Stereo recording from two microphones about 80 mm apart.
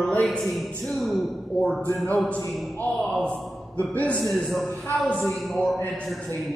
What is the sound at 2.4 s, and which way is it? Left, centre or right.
A man's voice, centre.